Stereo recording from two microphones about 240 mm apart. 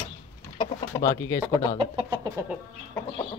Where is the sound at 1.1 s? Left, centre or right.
Centre.